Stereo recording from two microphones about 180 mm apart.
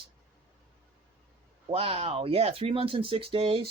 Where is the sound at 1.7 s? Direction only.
30° right (ahead or behind).